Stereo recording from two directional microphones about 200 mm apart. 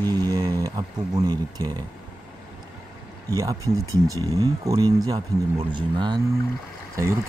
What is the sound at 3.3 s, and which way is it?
Speech, 15° right (ahead or behind).